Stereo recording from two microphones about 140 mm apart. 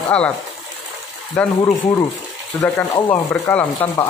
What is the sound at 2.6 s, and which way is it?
Speech, 15° left (ahead or behind).